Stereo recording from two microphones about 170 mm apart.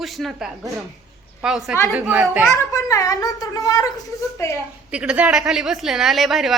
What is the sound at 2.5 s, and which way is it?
Speech, 20° left (ahead or behind).